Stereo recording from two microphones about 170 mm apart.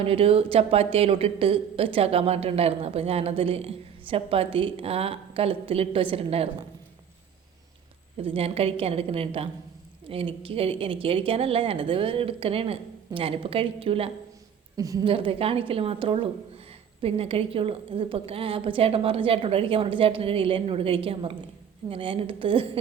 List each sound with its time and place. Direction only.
0.0 s speech: 35° right (ahead or behind)
8.2 s speech: 35° right (ahead or behind)
14.8 s speech: 20° right (ahead or behind)